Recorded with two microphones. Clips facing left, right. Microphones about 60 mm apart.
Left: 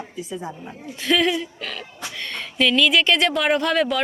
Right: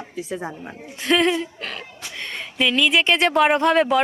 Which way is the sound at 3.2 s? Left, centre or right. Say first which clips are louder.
Right 3 dB; right.